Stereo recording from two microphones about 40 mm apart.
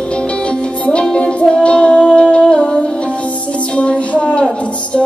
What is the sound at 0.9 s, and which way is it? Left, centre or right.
Music, left.